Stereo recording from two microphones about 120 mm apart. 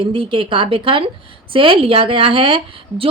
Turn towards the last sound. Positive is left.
turn(degrees=-50)  # may be behind; listen again after turning